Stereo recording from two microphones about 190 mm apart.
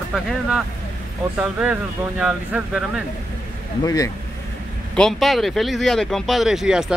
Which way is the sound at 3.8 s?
20° left (ahead or behind).